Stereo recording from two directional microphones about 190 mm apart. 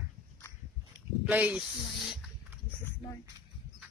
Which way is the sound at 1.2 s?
10° right (ahead or behind).